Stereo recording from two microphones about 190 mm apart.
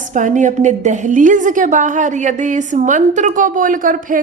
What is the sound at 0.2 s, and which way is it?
A woman's voice, 40° right (ahead or behind).